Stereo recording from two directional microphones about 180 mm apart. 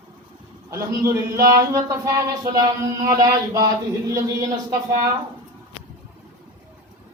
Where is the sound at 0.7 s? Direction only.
15° right (ahead or behind).